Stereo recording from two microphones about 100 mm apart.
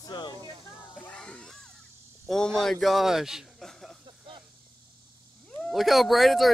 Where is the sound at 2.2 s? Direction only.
5° left (ahead or behind).